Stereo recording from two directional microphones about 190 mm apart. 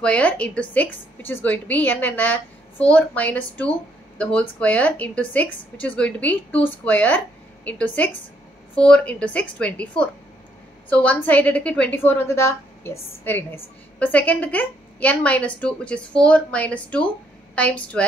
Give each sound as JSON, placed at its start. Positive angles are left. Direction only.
{"t": 0.0, "sound": "a woman's voice", "side_deg": 5}